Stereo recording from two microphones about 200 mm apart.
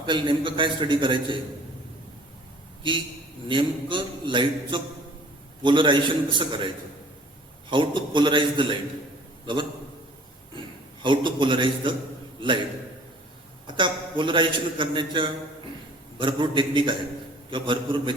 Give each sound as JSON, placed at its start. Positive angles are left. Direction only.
{"t": 0.0, "sound": "a man's voice", "side_deg": -25}
{"t": 3.5, "sound": "a man's voice", "side_deg": -25}
{"t": 7.7, "sound": "a man's voice", "side_deg": -25}
{"t": 11.0, "sound": "a man's voice", "side_deg": -25}
{"t": 13.7, "sound": "a man's voice", "side_deg": -25}